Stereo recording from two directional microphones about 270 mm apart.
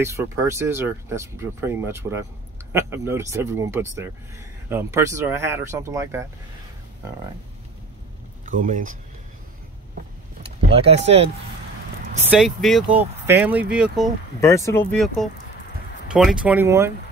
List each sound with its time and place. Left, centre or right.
0.0 s speech: centre
8.5 s speech: right
10.4 s speech: right
12.3 s speech: centre
14.4 s speech: centre